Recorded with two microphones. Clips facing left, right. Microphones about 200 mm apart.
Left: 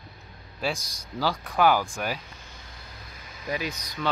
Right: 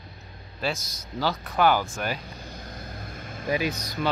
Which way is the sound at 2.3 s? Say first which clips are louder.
Right 8 dB; 35° right (ahead or behind).